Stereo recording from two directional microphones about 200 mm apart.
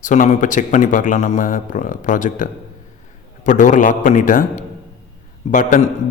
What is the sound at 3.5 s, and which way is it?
A man's voice, 40° left (ahead or behind).